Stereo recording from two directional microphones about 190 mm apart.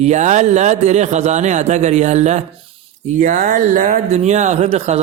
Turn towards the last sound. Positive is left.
turn(degrees=-35)  # may be behind; listen again after turning